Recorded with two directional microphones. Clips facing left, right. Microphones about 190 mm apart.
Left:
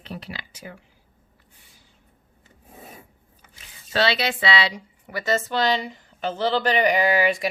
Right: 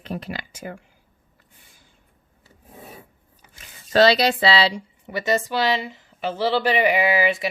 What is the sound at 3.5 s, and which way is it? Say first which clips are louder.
Speech: right 7 dB; 45° right (ahead or behind).